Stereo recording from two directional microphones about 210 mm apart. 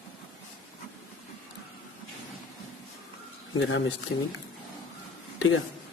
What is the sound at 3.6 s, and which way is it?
Speech, 65° left (ahead or behind).